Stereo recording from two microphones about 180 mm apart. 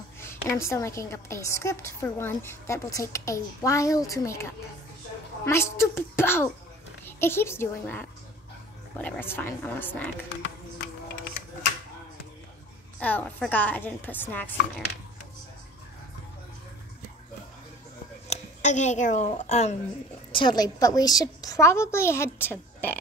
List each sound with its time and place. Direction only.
0.2 s a woman's voice: 15° left (ahead or behind)
13.0 s a woman's voice: 10° left (ahead or behind)
18.3 s speech: 40° left (ahead or behind)
20.3 s a woman's voice: 25° left (ahead or behind)